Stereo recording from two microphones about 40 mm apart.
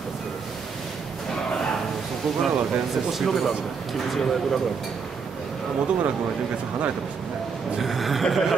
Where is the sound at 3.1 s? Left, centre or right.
Centre.